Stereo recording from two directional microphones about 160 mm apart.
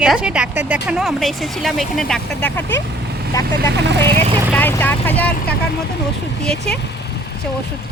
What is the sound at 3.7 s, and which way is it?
Speech, 90° right.